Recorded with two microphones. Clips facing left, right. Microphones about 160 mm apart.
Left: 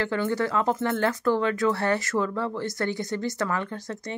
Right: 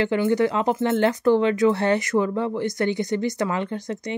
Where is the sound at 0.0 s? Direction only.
20° right (ahead or behind).